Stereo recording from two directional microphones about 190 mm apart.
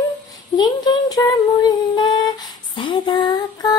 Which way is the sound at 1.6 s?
20° left (ahead or behind).